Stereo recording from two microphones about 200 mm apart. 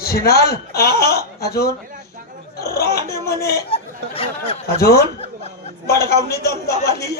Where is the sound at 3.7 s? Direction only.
30° left (ahead or behind).